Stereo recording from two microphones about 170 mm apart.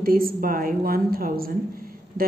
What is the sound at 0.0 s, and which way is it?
A woman's voice, 55° right (ahead or behind).